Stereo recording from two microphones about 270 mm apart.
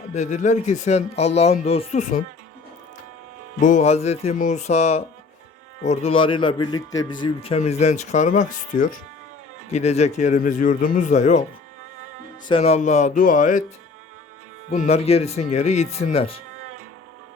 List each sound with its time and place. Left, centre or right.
0.1 s a man's voice: left
3.6 s a man's voice: left
12.5 s a man's voice: left
14.7 s a man's voice: left